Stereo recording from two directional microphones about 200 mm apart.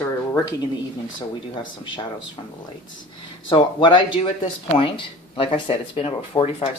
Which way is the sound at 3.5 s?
25° left (ahead or behind).